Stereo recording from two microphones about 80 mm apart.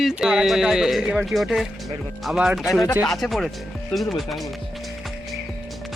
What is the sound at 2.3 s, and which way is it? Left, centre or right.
Speech, centre.